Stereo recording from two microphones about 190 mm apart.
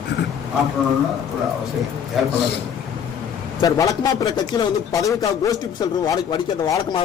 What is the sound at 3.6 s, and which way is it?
A man's voice, 20° left (ahead or behind).